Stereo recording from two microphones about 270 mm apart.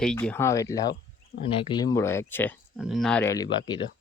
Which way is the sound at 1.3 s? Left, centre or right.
Left.